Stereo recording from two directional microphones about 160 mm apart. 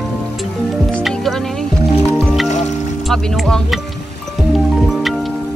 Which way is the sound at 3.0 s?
Centre (ahead or behind).